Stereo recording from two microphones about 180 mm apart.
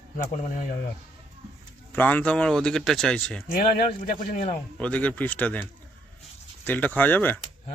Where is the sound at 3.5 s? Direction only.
50° left (ahead or behind).